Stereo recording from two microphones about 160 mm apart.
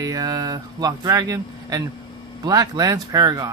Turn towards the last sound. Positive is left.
turn(degrees=-25)  # may be behind; listen again after turning